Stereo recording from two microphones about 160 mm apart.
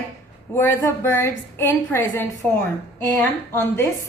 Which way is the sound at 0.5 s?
15° left (ahead or behind).